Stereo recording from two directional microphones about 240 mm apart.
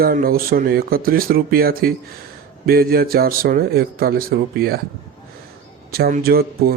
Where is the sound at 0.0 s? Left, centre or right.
Right.